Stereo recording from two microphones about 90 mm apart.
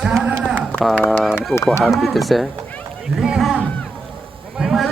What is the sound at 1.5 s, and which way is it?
Speech, 15° left (ahead or behind).